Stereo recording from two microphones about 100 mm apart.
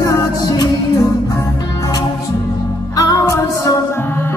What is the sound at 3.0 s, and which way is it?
Music, 35° left (ahead or behind).